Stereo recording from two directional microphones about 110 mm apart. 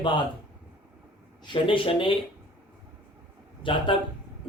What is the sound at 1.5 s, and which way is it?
Speech, 55° left (ahead or behind).